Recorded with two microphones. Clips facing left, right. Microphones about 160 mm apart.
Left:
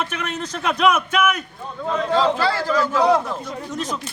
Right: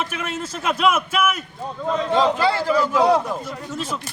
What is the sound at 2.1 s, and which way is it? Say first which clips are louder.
A man's voice: right 1 dB; 20° right (ahead or behind).